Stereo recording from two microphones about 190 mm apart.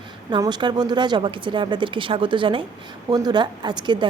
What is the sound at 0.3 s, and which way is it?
Speech, 20° right (ahead or behind).